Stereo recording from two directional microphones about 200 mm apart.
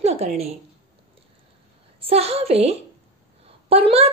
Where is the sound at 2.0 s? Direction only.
30° right (ahead or behind).